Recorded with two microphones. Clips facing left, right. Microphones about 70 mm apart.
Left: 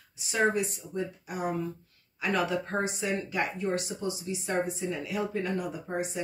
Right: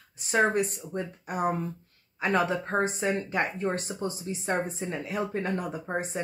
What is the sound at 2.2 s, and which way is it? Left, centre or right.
Speech, right.